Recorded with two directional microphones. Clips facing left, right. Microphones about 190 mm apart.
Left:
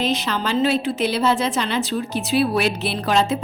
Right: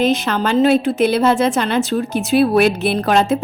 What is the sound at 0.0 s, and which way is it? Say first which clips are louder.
A woman's voice: right 6 dB; 50° right (ahead or behind).